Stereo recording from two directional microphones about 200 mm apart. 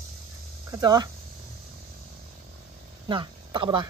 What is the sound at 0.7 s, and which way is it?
Speech, 20° right (ahead or behind).